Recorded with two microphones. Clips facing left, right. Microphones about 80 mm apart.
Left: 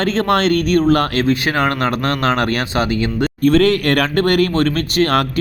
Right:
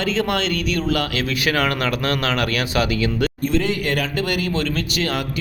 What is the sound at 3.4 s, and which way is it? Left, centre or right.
Speech, left.